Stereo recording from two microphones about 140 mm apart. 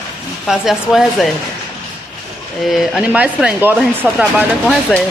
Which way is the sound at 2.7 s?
5° right (ahead or behind).